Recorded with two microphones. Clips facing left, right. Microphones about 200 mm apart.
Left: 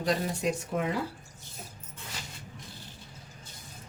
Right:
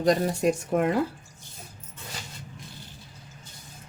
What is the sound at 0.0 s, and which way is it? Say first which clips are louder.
Speech: right 7 dB; 45° right (ahead or behind).